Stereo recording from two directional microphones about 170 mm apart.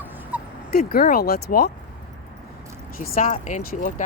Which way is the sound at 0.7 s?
60° left (ahead or behind).